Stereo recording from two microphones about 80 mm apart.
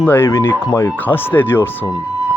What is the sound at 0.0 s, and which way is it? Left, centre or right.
Speech, left.